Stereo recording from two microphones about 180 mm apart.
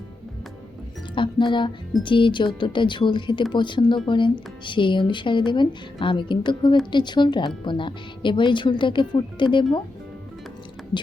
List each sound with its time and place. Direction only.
1.1 s a woman's voice: 25° left (ahead or behind)